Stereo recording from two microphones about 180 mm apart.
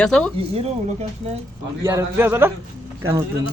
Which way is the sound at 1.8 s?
10° right (ahead or behind).